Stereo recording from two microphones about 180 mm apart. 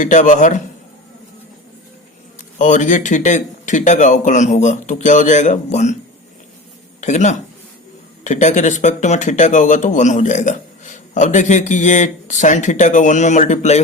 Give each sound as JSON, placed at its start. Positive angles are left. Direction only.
{"t": 0.0, "sound": "speech", "side_deg": 45}
{"t": 2.6, "sound": "speech", "side_deg": 45}
{"t": 7.0, "sound": "speech", "side_deg": 40}